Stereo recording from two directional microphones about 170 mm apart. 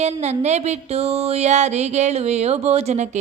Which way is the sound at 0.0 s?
40° right (ahead or behind).